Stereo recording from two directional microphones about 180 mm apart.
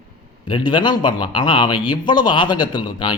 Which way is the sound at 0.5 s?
25° left (ahead or behind).